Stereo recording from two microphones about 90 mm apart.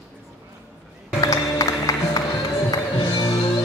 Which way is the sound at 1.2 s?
40° left (ahead or behind).